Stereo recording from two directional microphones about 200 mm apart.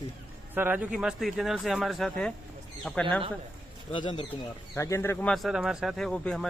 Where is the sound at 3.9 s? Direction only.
25° left (ahead or behind).